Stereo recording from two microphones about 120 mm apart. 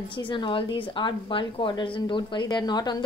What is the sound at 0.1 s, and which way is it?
A woman's voice, 40° left (ahead or behind).